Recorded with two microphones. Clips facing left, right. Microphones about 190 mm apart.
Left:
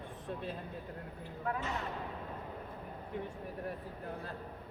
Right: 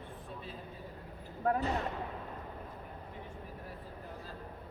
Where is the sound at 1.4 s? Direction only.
40° right (ahead or behind).